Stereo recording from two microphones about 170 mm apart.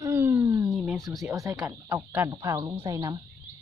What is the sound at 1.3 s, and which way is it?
Speech, 15° right (ahead or behind).